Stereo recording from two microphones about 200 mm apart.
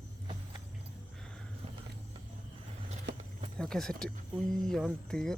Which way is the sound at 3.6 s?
Centre (ahead or behind).